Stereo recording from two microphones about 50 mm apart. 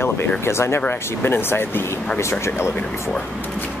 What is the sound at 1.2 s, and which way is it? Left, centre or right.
Speech, left.